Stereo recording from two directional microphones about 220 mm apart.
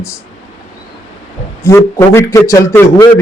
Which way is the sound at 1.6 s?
15° left (ahead or behind).